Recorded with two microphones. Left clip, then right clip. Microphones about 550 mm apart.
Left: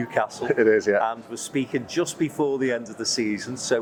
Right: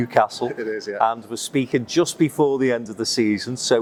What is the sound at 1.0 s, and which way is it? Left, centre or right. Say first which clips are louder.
Speech: right 6 dB; right.